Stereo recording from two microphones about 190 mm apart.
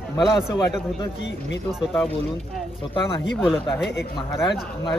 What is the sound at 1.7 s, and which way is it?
Speech, centre (ahead or behind).